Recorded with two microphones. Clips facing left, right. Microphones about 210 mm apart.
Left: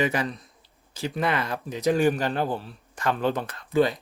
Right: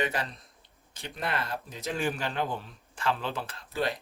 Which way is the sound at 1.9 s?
40° left (ahead or behind).